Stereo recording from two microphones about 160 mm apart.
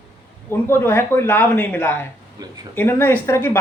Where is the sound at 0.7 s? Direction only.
15° left (ahead or behind).